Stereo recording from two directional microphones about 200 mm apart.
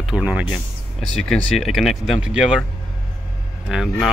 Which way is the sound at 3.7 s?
Centre (ahead or behind).